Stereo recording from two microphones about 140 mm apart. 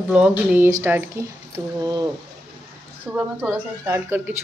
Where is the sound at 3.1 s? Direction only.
10° right (ahead or behind).